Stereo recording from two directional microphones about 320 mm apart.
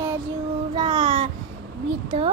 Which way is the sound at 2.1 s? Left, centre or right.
Centre.